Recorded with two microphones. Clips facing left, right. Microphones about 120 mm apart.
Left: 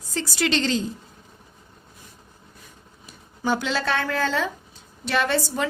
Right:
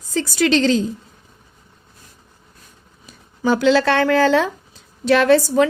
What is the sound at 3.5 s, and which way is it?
Speech, 90° right.